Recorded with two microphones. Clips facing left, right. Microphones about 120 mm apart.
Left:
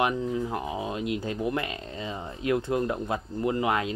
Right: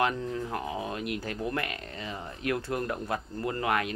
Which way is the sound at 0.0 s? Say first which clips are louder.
Left 3 dB; 15° left (ahead or behind).